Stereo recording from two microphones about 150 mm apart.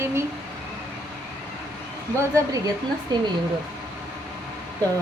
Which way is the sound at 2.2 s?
20° right (ahead or behind).